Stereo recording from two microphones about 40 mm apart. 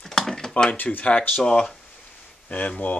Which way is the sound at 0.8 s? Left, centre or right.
Left.